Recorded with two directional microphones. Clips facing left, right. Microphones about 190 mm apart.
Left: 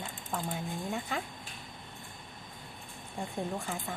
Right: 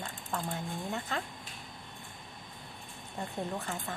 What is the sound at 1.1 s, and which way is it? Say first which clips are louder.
Speech: right 1 dB; 10° left (ahead or behind).